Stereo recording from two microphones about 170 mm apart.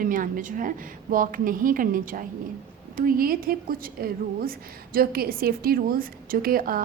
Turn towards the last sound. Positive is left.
turn(degrees=-55)  # may be behind; listen again after turning